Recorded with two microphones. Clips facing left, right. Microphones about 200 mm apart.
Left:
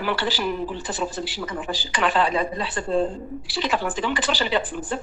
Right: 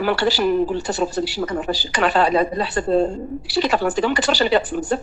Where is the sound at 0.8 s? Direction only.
70° right (ahead or behind).